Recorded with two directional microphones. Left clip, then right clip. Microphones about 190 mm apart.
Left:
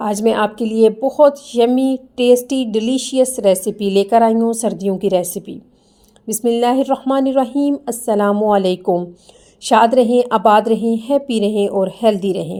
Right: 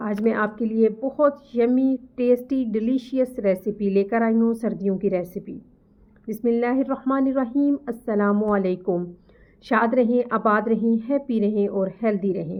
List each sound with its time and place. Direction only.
0.0 s a woman's voice: 25° left (ahead or behind)